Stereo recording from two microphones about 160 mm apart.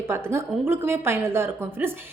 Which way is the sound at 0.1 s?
15° right (ahead or behind).